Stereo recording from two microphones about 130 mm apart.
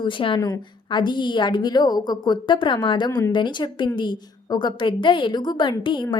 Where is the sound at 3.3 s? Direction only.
35° left (ahead or behind).